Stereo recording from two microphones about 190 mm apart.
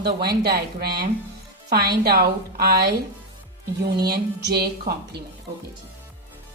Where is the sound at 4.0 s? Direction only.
55° right (ahead or behind).